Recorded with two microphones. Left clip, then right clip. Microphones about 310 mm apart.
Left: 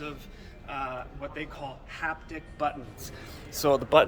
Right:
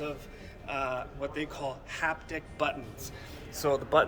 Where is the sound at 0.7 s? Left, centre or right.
Centre.